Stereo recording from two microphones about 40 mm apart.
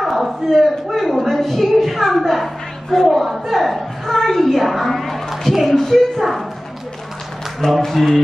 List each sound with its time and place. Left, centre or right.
0.0 s a man's voice: centre
7.6 s a woman's voice: centre